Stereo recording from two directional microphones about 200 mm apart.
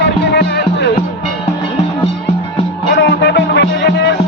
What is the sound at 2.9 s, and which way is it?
Music, 60° left (ahead or behind).